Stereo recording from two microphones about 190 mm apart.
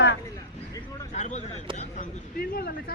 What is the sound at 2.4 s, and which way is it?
Speech, 55° left (ahead or behind).